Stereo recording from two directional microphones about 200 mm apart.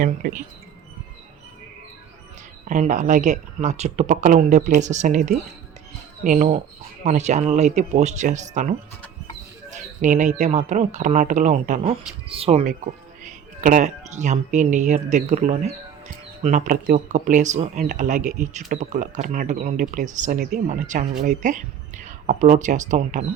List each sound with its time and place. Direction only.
0.0 s speech: 40° right (ahead or behind)
2.6 s speech: 35° right (ahead or behind)